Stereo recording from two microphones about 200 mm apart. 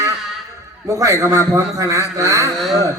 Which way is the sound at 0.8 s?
15° right (ahead or behind).